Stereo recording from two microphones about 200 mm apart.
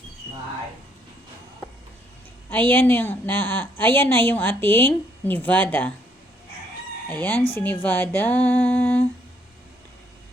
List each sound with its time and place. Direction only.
2.5 s a woman's voice: 10° left (ahead or behind)
7.1 s a woman's voice: 10° left (ahead or behind)